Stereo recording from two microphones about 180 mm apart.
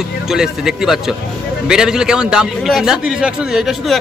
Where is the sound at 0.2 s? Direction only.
5° right (ahead or behind).